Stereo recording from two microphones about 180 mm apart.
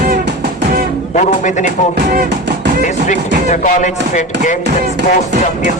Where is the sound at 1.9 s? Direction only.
70° right (ahead or behind).